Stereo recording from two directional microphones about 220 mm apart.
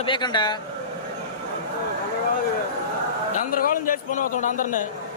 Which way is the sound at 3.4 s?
40° left (ahead or behind).